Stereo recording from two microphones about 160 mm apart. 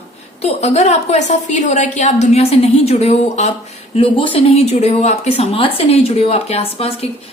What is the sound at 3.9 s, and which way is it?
Speech, 35° left (ahead or behind).